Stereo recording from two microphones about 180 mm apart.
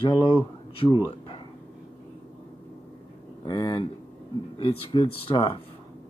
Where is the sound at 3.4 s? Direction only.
25° left (ahead or behind).